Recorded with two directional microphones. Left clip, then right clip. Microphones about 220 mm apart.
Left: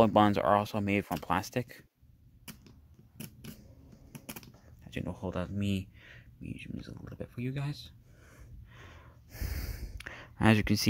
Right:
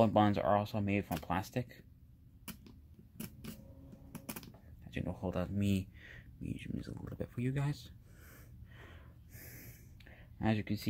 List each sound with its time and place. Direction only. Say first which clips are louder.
0.0 s speech: left 5 dB; 30° left (ahead or behind)
4.1 s typing: left 1 dB; 15° left (ahead or behind)
9.3 s a sound: left 11 dB; 30° left (ahead or behind)